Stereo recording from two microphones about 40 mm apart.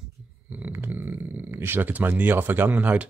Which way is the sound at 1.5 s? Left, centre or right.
Right.